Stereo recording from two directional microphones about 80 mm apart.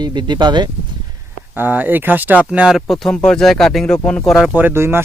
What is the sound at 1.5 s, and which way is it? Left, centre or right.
Speech, right.